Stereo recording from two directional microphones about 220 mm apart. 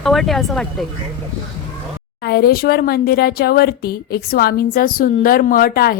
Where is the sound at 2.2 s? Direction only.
45° left (ahead or behind).